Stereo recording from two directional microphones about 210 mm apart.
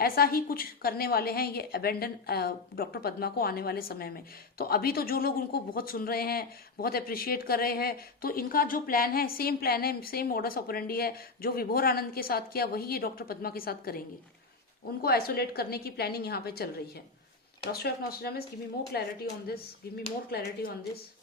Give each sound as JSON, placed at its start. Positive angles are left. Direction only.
{"t": 0.0, "sound": "speech", "side_deg": 45}
{"t": 15.0, "sound": "speech", "side_deg": 45}
{"t": 17.7, "sound": "speech", "side_deg": 50}